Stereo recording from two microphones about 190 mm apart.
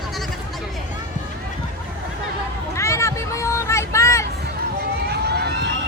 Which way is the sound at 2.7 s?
15° left (ahead or behind).